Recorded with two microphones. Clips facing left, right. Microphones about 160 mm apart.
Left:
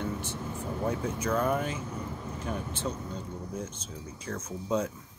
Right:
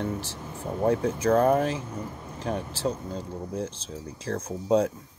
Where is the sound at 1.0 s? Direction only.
35° right (ahead or behind).